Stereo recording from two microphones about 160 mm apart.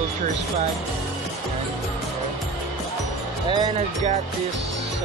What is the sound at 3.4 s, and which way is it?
Speech, 30° right (ahead or behind).